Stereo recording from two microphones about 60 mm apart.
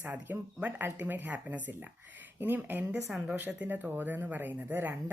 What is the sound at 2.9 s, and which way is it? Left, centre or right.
Speech, centre.